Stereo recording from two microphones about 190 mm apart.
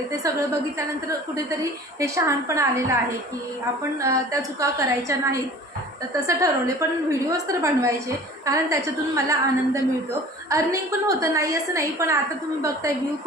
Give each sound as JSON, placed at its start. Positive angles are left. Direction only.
{"t": 0.2, "sound": "a woman's voice", "side_deg": -15}
{"t": 2.0, "sound": "a woman's voice", "side_deg": -15}